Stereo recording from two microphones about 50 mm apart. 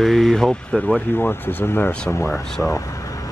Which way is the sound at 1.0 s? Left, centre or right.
Left.